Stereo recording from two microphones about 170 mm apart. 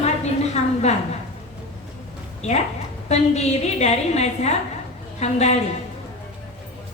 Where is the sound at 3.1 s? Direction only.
40° left (ahead or behind).